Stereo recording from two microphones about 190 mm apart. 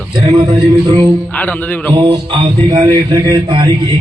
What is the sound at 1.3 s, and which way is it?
Speech, 10° left (ahead or behind).